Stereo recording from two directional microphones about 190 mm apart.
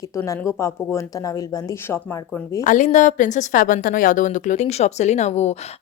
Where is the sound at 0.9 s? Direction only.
20° left (ahead or behind).